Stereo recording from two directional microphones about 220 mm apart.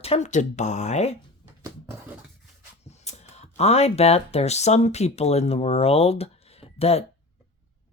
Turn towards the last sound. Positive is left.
turn(degrees=30)  # may be behind; listen again after turning